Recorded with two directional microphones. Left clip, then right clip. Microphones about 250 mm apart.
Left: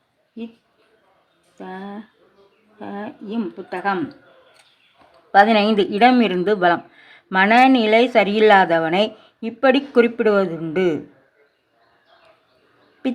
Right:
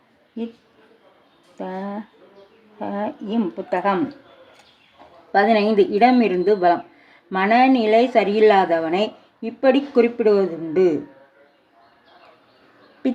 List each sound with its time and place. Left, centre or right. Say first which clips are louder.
1.5 s speech: right 4 dB; centre
5.3 s speech: left 3 dB; left